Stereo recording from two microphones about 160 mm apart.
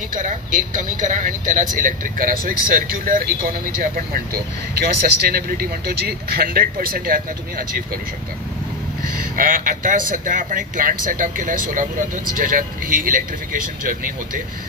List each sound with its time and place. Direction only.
0.1 s speech: 55° right (ahead or behind)
4.7 s speech: 75° right (ahead or behind)
9.4 s speech: 60° right (ahead or behind)